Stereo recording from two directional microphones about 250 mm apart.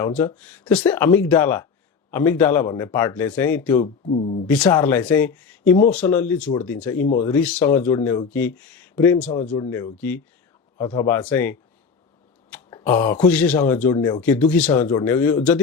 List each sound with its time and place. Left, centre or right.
0.0 s speech: centre
4.0 s speech: left
4.4 s speech: centre
12.5 s a sound: centre
13.1 s speech: centre
14.2 s speech: centre